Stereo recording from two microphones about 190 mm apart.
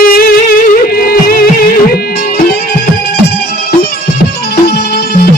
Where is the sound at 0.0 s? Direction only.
50° left (ahead or behind).